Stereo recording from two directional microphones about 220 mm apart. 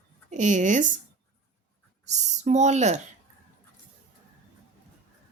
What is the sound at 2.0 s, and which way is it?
Speech, 30° right (ahead or behind).